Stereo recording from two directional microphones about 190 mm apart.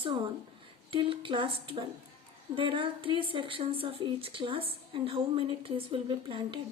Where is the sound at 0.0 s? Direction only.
25° right (ahead or behind).